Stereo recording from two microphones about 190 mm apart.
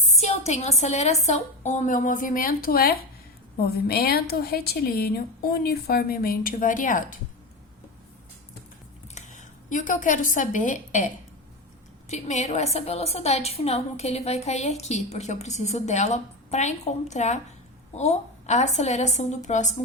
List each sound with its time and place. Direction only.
0.1 s a woman's voice: 35° left (ahead or behind)
9.1 s a woman's voice: 40° left (ahead or behind)
12.0 s a woman's voice: 35° left (ahead or behind)